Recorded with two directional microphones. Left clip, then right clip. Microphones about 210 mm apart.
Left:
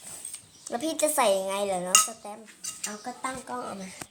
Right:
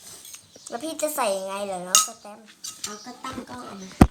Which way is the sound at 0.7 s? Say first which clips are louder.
Left 1 dB; 10° left (ahead or behind).